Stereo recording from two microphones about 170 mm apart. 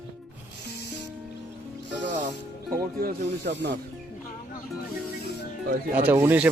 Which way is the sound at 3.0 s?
75° right (ahead or behind).